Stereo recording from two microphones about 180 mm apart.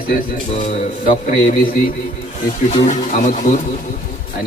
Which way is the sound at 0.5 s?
35° left (ahead or behind).